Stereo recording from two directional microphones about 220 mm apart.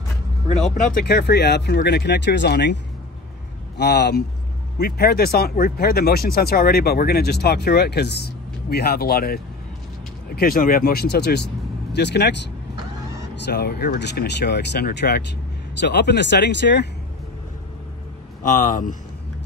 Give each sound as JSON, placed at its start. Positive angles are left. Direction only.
{"t": 0.7, "sound": "speech", "side_deg": 45}
{"t": 13.5, "sound": "speech", "side_deg": 45}
{"t": 18.4, "sound": "speech", "side_deg": 35}